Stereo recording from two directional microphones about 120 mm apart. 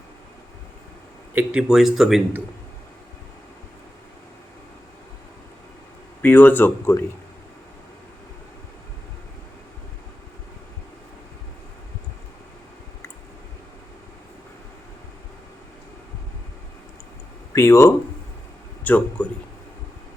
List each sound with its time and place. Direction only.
1.4 s speech: 5° right (ahead or behind)
6.2 s speech: 15° left (ahead or behind)
17.5 s speech: 25° left (ahead or behind)
18.9 s speech: 10° left (ahead or behind)